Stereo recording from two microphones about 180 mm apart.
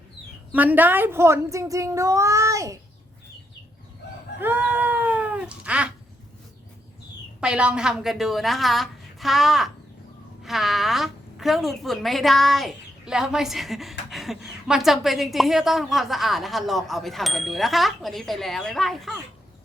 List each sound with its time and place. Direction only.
0.5 s a woman's voice: 10° right (ahead or behind)
4.4 s cat: 10° right (ahead or behind)
7.4 s a woman's voice: 5° right (ahead or behind)